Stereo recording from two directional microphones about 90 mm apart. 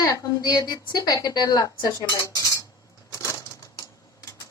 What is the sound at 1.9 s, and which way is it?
Speech, 35° left (ahead or behind).